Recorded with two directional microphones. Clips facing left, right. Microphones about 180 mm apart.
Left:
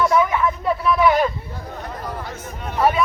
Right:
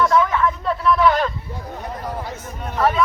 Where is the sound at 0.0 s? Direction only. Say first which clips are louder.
Even; 10° left (ahead or behind).